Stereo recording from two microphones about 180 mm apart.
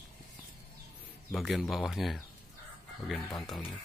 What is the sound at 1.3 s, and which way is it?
Speech, centre (ahead or behind).